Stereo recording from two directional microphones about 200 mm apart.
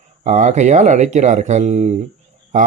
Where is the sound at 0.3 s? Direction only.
35° right (ahead or behind).